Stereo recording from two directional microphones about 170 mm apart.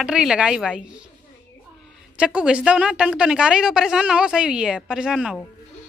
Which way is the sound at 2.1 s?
5° right (ahead or behind).